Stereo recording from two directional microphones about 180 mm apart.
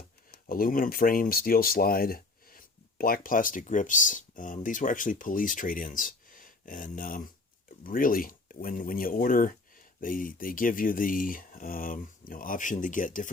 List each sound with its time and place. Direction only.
0.4 s speech: 50° left (ahead or behind)